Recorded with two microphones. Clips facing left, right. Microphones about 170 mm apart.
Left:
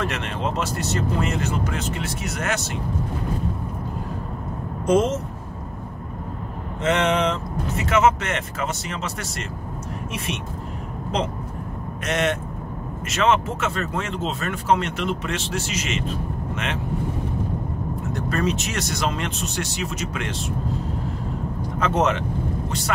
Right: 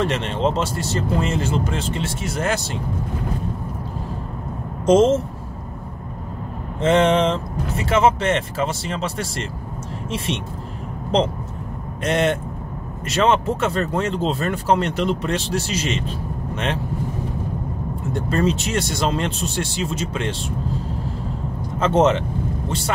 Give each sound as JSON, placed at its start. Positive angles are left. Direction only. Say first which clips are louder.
{"t": 0.0, "sound": "speech", "louder": "right 5 dB", "side_deg": -25}
{"t": 4.8, "sound": "speech", "louder": "right 5 dB", "side_deg": -25}
{"t": 6.8, "sound": "speech", "louder": "right 4 dB", "side_deg": -30}
{"t": 12.0, "sound": "speech", "louder": "right 4 dB", "side_deg": -30}
{"t": 18.1, "sound": "speech", "louder": "right 4 dB", "side_deg": -30}
{"t": 21.7, "sound": "speech", "louder": "right 5 dB", "side_deg": -25}